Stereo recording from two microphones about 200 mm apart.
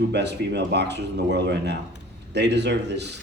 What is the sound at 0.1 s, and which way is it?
Speech, 60° right (ahead or behind).